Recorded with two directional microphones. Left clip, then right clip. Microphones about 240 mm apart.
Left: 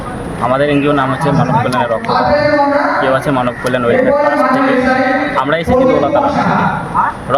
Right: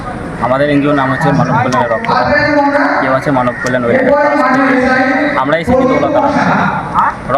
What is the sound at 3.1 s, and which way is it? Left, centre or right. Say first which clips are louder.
Speech: right 1 dB; centre.